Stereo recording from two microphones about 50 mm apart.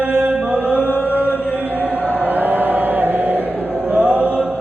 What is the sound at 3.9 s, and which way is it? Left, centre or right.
Music, right.